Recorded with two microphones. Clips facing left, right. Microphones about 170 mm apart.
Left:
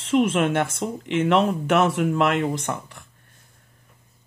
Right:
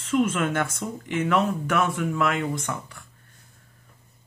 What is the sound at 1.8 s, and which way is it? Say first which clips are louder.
Speech: left 4 dB; 85° left.